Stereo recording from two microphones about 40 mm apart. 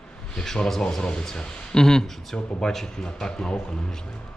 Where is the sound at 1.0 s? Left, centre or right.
Left; by 2.8 s centre.